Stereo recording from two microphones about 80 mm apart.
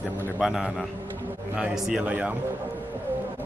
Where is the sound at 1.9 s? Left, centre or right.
Centre.